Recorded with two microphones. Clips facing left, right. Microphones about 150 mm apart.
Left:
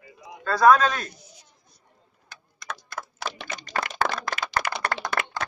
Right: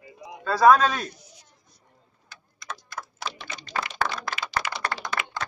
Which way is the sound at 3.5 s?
45° left (ahead or behind).